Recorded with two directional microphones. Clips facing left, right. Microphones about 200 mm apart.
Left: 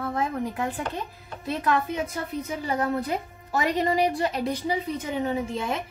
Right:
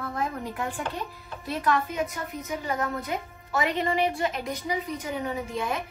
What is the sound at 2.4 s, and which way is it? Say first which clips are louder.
A woman's voice: left 2 dB; 35° left (ahead or behind).